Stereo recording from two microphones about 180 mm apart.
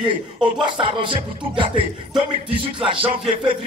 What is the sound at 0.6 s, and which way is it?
Speech, 25° right (ahead or behind).